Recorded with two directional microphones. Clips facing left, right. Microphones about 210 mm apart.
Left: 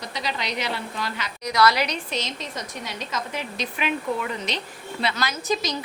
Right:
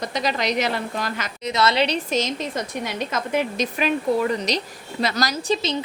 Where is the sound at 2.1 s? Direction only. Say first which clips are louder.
Right 7 dB; 50° right (ahead or behind).